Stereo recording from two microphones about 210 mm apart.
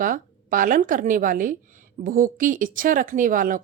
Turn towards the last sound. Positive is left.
turn(degrees=-40)  # may be behind; listen again after turning